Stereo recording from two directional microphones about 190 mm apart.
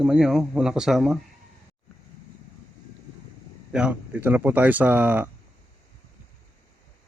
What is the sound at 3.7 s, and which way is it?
Speech, 5° right (ahead or behind).